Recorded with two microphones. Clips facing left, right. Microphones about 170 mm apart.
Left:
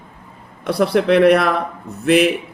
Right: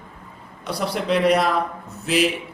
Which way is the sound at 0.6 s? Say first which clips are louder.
Left 9 dB; 60° left (ahead or behind).